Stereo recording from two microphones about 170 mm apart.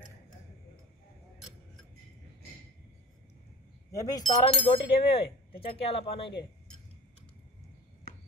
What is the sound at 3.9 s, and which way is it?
Speech, 20° left (ahead or behind).